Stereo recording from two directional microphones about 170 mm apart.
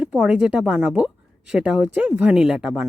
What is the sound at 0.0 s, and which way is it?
Speech, 5° right (ahead or behind).